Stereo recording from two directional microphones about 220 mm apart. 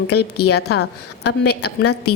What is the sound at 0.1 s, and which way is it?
A woman's voice, 45° left (ahead or behind).